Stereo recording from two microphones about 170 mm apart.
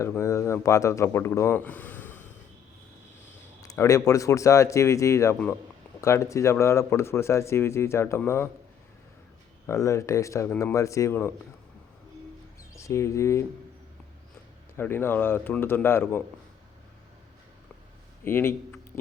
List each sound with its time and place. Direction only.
0.0 s speech: 15° left (ahead or behind)
3.6 s speech: 20° left (ahead or behind)
9.6 s speech: 20° left (ahead or behind)
12.7 s speech: 15° left (ahead or behind)
14.8 s speech: 15° left (ahead or behind)
18.3 s speech: 15° left (ahead or behind)